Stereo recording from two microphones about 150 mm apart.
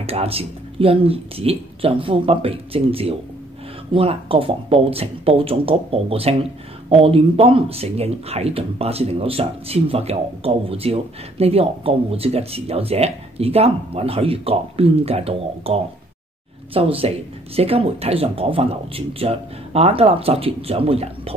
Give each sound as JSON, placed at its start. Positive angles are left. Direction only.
{"t": 0.0, "sound": "speech", "side_deg": -40}